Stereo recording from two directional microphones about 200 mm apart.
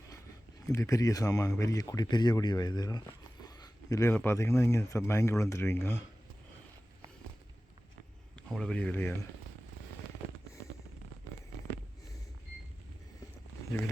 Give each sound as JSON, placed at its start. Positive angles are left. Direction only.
{"t": 0.7, "sound": "speech", "side_deg": 15}
{"t": 8.4, "sound": "speech", "side_deg": 5}